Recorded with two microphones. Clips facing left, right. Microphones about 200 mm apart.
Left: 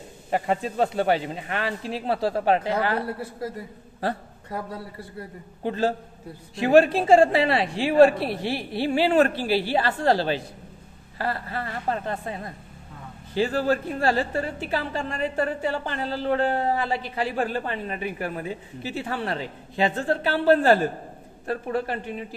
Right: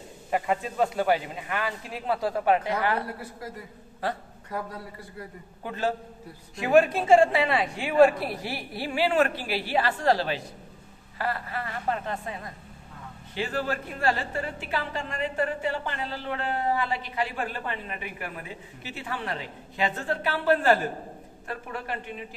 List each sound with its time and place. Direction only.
0.3 s speech: 30° left (ahead or behind)
4.0 s a sound: 30° left (ahead or behind)
5.6 s a woman's voice: 30° left (ahead or behind)